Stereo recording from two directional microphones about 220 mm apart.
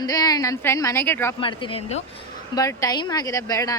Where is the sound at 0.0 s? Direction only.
15° left (ahead or behind).